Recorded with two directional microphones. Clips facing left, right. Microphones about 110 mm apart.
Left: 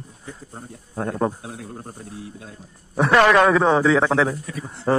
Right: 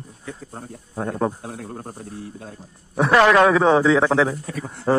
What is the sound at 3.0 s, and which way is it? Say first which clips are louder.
A man's voice: right 1 dB; centre (ahead or behind).